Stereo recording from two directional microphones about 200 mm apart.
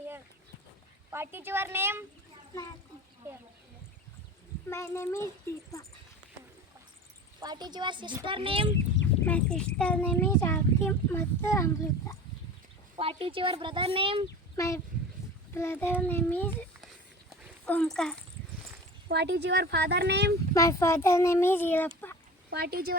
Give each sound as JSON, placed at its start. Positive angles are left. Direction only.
{"t": 1.1, "sound": "speech", "side_deg": -10}
{"t": 4.7, "sound": "a child's voice", "side_deg": 15}
{"t": 7.3, "sound": "speech", "side_deg": -20}
{"t": 9.2, "sound": "a child's voice", "side_deg": 5}
{"t": 13.0, "sound": "speech", "side_deg": -30}
{"t": 14.5, "sound": "a child's voice", "side_deg": 15}
{"t": 17.2, "sound": "horse", "side_deg": 5}
{"t": 19.0, "sound": "speech", "side_deg": -60}
{"t": 20.5, "sound": "a child's voice", "side_deg": 15}
{"t": 22.4, "sound": "speech", "side_deg": -50}